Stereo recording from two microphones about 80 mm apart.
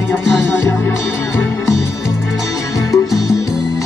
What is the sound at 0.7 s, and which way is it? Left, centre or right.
Music, left.